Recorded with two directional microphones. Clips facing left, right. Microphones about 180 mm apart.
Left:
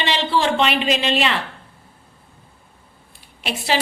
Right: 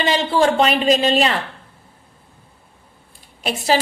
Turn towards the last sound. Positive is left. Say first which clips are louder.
# right 4 dB
turn(degrees=-40)  # may be behind; listen again after turning